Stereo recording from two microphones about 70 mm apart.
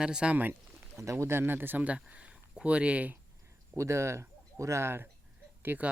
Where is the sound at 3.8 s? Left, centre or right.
Right.